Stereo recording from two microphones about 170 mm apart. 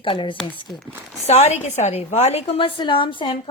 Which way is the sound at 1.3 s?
40° left (ahead or behind).